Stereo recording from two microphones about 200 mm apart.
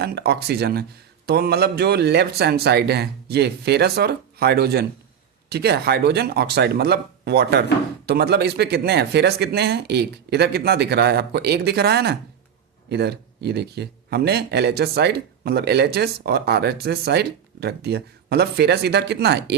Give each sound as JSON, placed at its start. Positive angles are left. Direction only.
{"t": 0.0, "sound": "speech", "side_deg": -50}